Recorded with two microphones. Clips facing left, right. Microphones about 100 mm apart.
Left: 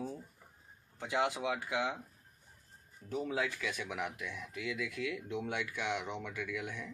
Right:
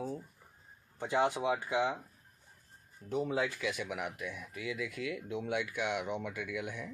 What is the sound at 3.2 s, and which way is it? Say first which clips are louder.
Speech: right 3 dB; 5° right (ahead or behind).